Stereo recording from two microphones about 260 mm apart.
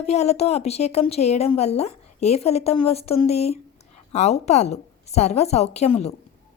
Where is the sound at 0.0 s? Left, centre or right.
Left.